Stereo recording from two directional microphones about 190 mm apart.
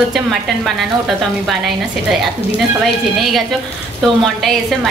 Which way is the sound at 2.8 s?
Centre (ahead or behind).